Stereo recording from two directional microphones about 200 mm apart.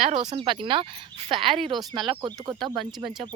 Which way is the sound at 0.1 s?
35° right (ahead or behind).